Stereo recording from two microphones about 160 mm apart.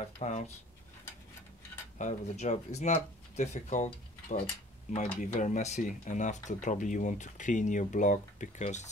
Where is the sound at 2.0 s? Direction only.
50° left (ahead or behind).